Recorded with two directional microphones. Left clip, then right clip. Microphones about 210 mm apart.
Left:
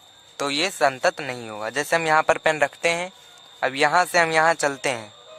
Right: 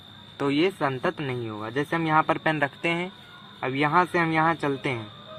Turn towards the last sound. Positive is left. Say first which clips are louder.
# left 4 dB
turn(degrees=55)  # may be behind; listen again after turning